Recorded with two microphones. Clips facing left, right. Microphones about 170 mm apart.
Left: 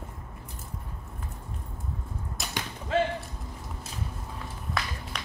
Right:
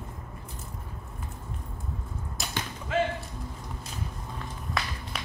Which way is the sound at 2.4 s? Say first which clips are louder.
Right 2 dB; centre (ahead or behind).